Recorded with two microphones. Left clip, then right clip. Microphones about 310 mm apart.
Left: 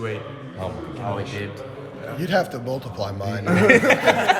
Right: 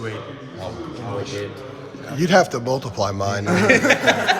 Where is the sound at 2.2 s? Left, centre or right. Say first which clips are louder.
Right 6 dB; right.